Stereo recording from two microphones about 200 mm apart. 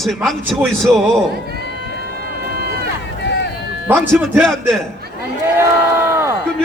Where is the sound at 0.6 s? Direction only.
10° right (ahead or behind).